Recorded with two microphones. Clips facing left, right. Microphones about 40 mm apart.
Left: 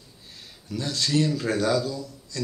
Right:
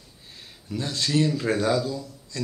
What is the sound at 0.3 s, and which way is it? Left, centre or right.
A man's voice, centre.